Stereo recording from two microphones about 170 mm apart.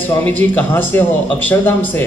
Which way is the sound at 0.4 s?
10° left (ahead or behind).